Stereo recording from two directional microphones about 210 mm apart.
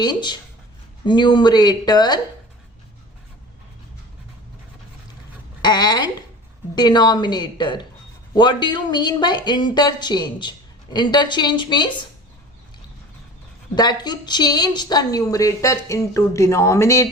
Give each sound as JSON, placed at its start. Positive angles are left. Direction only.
{"t": 0.0, "sound": "speech", "side_deg": 20}
{"t": 5.6, "sound": "speech", "side_deg": 20}
{"t": 13.7, "sound": "a woman's voice", "side_deg": 20}